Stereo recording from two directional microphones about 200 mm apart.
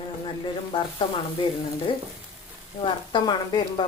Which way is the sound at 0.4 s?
25° left (ahead or behind).